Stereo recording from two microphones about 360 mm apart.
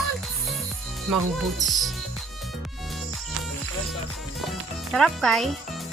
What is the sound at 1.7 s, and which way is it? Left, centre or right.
Music, centre.